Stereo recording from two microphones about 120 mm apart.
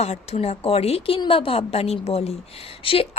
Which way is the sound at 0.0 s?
65° left (ahead or behind).